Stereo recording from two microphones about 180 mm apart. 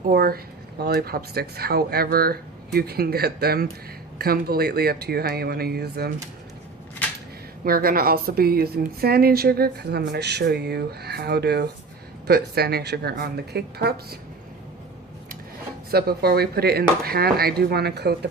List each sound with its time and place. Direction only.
0.1 s a woman's voice: 55° right (ahead or behind)
7.6 s a woman's voice: 55° right (ahead or behind)
15.9 s a woman's voice: 60° right (ahead or behind)